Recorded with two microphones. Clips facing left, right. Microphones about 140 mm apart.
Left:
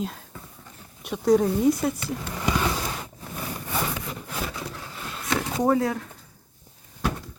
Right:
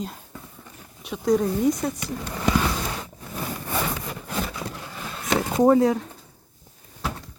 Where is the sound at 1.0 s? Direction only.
Centre (ahead or behind).